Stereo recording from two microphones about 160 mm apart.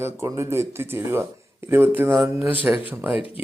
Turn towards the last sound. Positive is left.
turn(degrees=-10)  # may be behind; listen again after turning